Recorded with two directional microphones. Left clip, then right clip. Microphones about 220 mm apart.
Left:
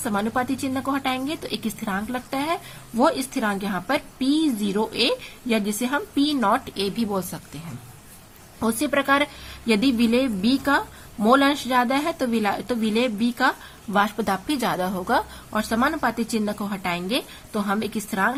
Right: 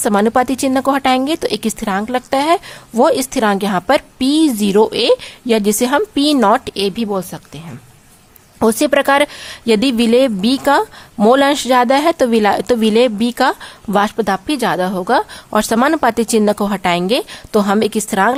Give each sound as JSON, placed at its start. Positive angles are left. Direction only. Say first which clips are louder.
{"t": 0.0, "sound": "a woman's voice", "louder": "right 11 dB", "side_deg": -40}
{"t": 8.5, "sound": "a woman's voice", "louder": "right 10 dB", "side_deg": -40}